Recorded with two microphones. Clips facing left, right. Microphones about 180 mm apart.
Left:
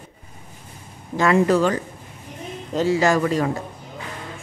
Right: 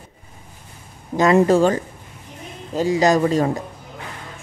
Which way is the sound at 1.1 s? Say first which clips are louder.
Right 3 dB; 20° right (ahead or behind).